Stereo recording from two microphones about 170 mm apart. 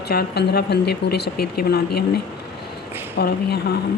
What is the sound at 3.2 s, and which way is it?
Speech, 70° left (ahead or behind).